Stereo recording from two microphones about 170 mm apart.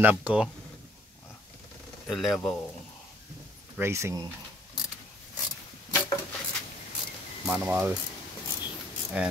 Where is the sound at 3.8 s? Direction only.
15° right (ahead or behind).